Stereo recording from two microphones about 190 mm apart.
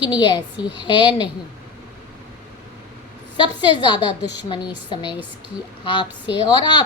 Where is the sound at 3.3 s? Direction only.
25° left (ahead or behind).